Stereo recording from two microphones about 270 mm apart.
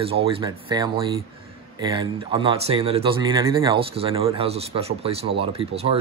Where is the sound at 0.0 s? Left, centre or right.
Right.